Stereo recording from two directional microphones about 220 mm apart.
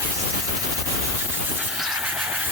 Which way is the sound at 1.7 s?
Centre (ahead or behind).